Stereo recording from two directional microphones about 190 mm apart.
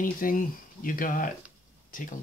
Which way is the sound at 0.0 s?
45° left (ahead or behind).